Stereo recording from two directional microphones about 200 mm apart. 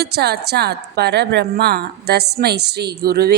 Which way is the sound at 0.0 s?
55° right (ahead or behind).